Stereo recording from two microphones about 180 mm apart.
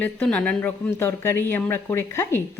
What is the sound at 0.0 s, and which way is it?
A woman's voice, 5° left (ahead or behind).